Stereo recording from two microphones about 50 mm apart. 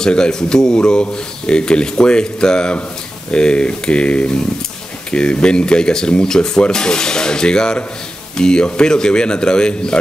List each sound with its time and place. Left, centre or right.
0.0 s a man's voice: centre